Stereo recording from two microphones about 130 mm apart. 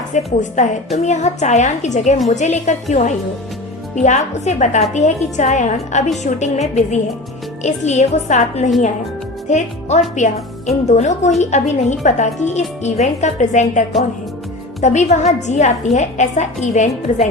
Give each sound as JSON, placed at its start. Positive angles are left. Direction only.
{"t": 0.1, "sound": "a woman's voice", "side_deg": 70}